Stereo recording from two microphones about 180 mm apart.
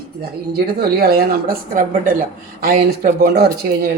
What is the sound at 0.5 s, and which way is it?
A woman's voice, 60° right (ahead or behind).